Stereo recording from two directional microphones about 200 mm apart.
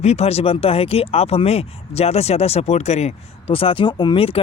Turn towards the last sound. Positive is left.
turn(degrees=30)  # may be behind; listen again after turning